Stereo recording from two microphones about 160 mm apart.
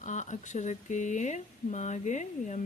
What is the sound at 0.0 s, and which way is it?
Speech, 50° left (ahead or behind).